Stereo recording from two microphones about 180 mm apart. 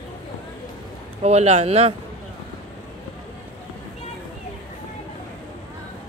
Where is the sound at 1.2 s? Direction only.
35° right (ahead or behind).